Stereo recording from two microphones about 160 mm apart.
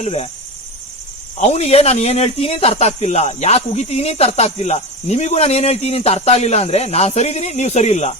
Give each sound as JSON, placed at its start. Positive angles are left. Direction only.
{"t": 0.0, "sound": "speech", "side_deg": 40}
{"t": 1.4, "sound": "speech", "side_deg": 40}